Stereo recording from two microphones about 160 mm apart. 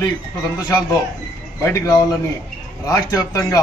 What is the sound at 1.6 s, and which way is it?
Speech, 20° left (ahead or behind).